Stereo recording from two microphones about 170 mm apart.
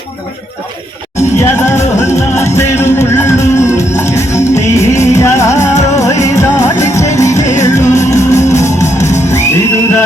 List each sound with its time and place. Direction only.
1.4 s music: 15° left (ahead or behind)